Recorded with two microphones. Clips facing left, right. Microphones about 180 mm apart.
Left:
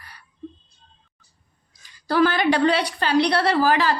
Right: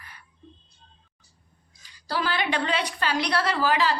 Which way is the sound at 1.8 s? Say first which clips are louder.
Left 10 dB; 50° left (ahead or behind).